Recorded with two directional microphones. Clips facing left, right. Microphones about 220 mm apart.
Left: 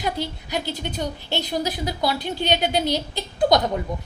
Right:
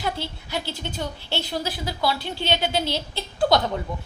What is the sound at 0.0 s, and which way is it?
A woman's voice, 15° left (ahead or behind).